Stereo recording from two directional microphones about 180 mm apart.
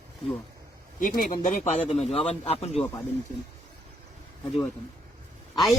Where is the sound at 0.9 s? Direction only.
50° left (ahead or behind).